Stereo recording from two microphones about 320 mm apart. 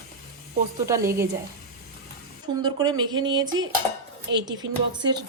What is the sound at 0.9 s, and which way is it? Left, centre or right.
Speech, centre.